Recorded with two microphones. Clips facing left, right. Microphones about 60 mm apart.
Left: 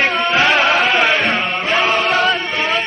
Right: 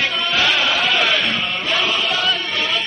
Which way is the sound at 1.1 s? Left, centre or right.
Left.